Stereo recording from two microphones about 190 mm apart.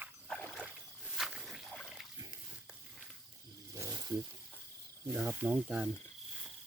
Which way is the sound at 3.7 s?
20° right (ahead or behind).